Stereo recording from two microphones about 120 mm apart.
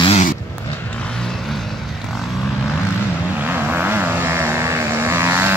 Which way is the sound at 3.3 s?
15° right (ahead or behind).